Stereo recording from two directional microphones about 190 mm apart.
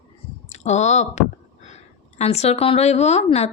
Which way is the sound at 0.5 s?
35° left (ahead or behind).